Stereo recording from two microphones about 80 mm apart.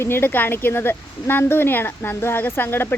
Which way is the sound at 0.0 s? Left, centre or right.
Left.